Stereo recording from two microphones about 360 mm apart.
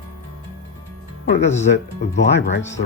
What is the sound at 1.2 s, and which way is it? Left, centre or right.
Speech, left.